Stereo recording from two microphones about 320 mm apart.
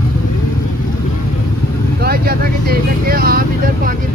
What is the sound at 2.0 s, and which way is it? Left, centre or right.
Vehicle, right.